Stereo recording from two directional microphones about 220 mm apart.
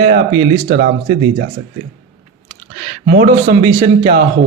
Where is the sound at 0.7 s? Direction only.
40° right (ahead or behind).